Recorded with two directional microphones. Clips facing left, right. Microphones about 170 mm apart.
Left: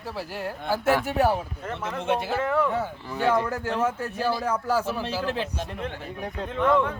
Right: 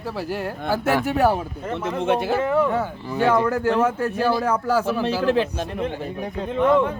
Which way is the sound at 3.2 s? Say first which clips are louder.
Right 5 dB; 80° right.